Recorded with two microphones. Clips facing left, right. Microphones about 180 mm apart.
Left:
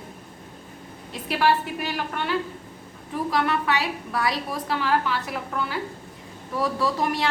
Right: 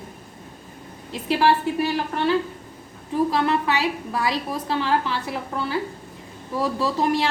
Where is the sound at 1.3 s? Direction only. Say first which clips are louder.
Right 3 dB; 25° right (ahead or behind).